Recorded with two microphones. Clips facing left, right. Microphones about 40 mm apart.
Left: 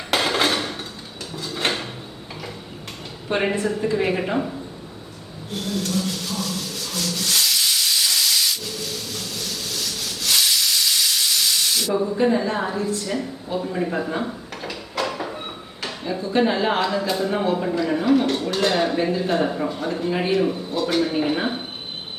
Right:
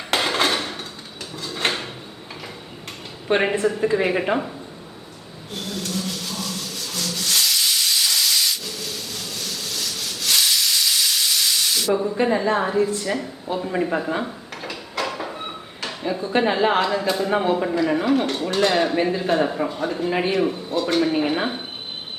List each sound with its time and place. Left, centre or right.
0.1 s a sound: centre
1.4 s drawer open or close: centre
3.3 s a woman's voice: right
4.0 s speech: centre
5.5 s rub: centre
12.1 s a woman's voice: right
13.9 s speech: centre
14.5 s a sound: centre
16.3 s speech: centre
17.2 s a woman's voice: centre
17.7 s speech: centre